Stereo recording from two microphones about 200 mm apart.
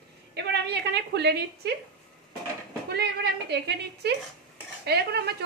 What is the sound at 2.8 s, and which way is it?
A woman's voice, 55° right (ahead or behind).